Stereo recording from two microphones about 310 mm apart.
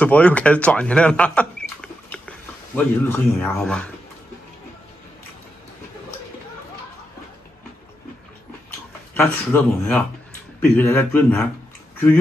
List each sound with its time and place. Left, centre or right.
0.0 s speech: centre
9.1 s speech: centre